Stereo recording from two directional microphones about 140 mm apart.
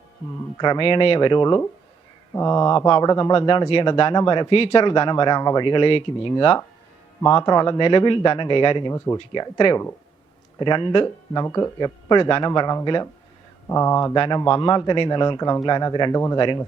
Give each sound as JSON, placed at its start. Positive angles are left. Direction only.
{"t": 0.6, "sound": "speech", "side_deg": 35}
{"t": 14.2, "sound": "speech", "side_deg": 35}